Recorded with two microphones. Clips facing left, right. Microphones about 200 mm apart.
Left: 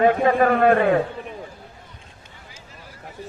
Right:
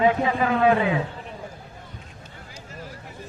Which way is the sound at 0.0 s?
55° left (ahead or behind).